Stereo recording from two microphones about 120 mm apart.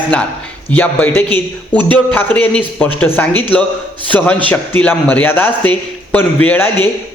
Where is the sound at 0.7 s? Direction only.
15° left (ahead or behind).